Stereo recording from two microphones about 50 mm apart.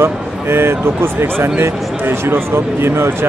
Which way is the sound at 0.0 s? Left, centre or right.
Right.